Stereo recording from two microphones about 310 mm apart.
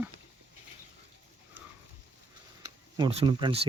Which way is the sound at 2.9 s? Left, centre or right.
Centre.